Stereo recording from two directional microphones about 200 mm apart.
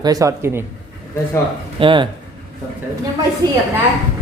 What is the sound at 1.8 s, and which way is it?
Speech, 25° right (ahead or behind).